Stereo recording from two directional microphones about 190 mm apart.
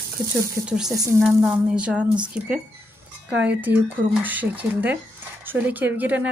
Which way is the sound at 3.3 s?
65° right (ahead or behind).